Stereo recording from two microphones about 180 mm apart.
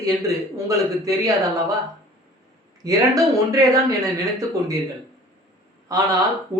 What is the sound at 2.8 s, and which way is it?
A woman's voice, 20° right (ahead or behind).